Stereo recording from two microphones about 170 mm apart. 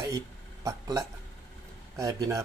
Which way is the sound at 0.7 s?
20° right (ahead or behind).